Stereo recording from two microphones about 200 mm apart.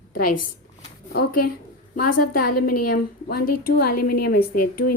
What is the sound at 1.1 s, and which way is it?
A woman's voice, 50° left (ahead or behind).